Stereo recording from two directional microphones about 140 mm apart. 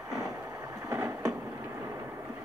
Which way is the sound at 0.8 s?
20° right (ahead or behind).